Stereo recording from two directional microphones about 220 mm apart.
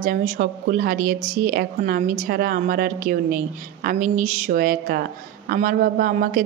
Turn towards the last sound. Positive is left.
turn(degrees=-40)  # may be behind; listen again after turning